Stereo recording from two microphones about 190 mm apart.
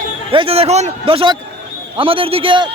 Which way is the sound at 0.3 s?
30° right (ahead or behind).